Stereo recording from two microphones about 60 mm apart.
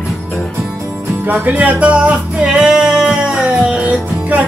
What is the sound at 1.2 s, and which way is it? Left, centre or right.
Music, right.